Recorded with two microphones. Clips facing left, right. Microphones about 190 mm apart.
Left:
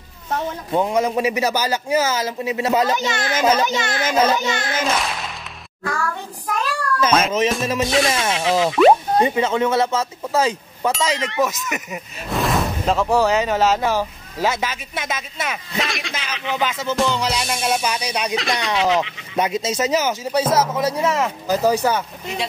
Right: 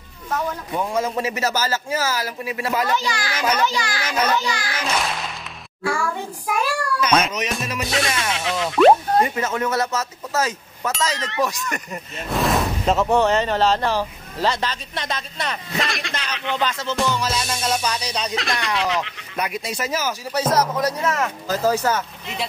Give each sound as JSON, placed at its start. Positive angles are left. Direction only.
{"t": 0.7, "sound": "speech", "side_deg": 20}
{"t": 4.8, "sound": "a sound", "side_deg": 0}
{"t": 5.9, "sound": "a child's voice", "side_deg": -10}
{"t": 7.1, "sound": "speech", "side_deg": 0}
{"t": 7.3, "sound": "speech", "side_deg": 25}
{"t": 8.2, "sound": "speech", "side_deg": 0}
{"t": 9.2, "sound": "speech", "side_deg": 25}
{"t": 10.9, "sound": "speech", "side_deg": 0}
{"t": 17.0, "sound": "music", "side_deg": 20}
{"t": 18.3, "sound": "speech", "side_deg": 0}
{"t": 19.3, "sound": "speech", "side_deg": 20}
{"t": 20.4, "sound": "music", "side_deg": 5}
{"t": 21.0, "sound": "music", "side_deg": 20}